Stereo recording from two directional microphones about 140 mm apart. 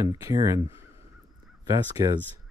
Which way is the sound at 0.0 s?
25° right (ahead or behind).